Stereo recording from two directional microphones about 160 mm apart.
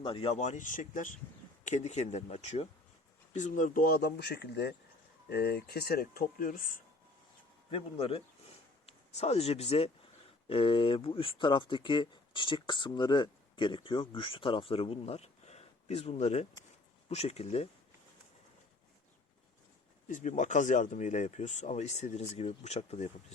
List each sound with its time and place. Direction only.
0.0 s speech: 35° left (ahead or behind); by 6.8 s 55° left (ahead or behind)
7.7 s speech: 35° left (ahead or behind)
20.1 s speech: 50° left (ahead or behind)